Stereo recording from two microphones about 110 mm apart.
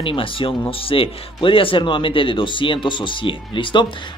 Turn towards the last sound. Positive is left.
turn(degrees=45)  # may be behind; listen again after turning